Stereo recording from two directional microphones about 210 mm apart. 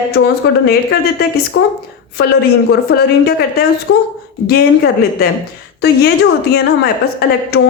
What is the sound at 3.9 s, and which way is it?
Speech, 60° left (ahead or behind).